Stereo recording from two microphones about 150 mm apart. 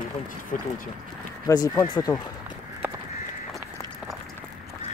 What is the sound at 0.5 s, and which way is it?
Speech, 60° left (ahead or behind).